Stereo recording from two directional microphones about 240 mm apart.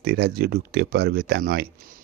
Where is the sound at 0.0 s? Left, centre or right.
Right.